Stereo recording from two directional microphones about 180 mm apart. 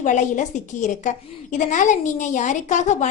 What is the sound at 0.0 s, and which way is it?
A woman's voice, 45° left (ahead or behind).